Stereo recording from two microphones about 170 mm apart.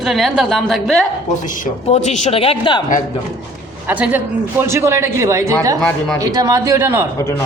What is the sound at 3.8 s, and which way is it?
A man's voice, 10° right (ahead or behind).